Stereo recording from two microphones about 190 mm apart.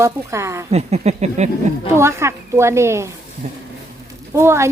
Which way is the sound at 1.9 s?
15° right (ahead or behind).